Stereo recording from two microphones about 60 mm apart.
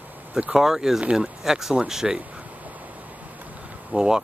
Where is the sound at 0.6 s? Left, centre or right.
Centre.